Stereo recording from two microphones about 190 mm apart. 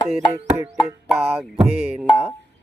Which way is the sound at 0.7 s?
10° right (ahead or behind).